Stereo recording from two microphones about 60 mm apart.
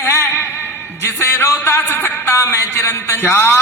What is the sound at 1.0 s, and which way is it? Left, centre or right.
Speech, left.